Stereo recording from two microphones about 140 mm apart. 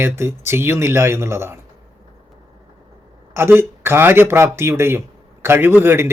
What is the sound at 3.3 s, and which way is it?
Speech, 15° right (ahead or behind).